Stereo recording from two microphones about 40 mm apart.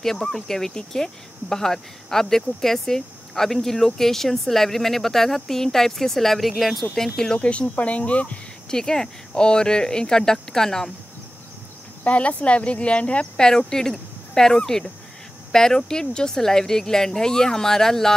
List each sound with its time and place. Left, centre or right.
0.0 s speech: centre
7.3 s speech: left
8.6 s speech: centre
12.0 s speech: left
13.4 s speech: centre